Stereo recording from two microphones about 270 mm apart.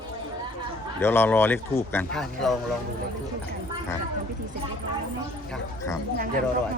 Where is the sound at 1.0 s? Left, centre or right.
Centre.